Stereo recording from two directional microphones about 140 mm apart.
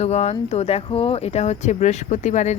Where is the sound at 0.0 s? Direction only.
50° left (ahead or behind).